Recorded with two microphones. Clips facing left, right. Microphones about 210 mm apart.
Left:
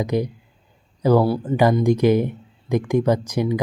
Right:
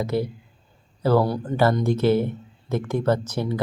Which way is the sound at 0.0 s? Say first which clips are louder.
Left 2 dB; 15° left (ahead or behind).